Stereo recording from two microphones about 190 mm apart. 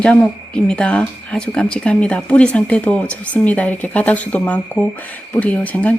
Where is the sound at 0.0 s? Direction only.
5° left (ahead or behind).